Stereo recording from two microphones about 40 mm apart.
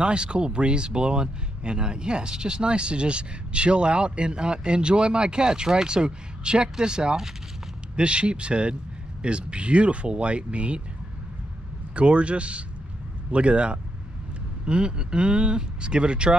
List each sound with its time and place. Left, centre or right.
0.0 s speech: right
11.9 s speech: right